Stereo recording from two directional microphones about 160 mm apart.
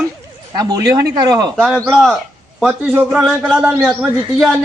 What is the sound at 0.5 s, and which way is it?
Speech, 25° right (ahead or behind).